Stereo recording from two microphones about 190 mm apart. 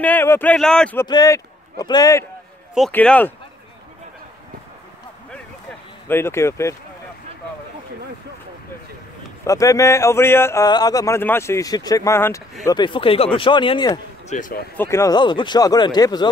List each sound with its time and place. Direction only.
0.0 s speech: 10° left (ahead or behind)
1.0 s a man's voice: 20° left (ahead or behind)
2.9 s speech: 10° left (ahead or behind)
6.0 s speech: 10° left (ahead or behind)
9.5 s speech: 15° left (ahead or behind)
14.3 s speech: 45° left (ahead or behind)
14.8 s speech: 15° left (ahead or behind)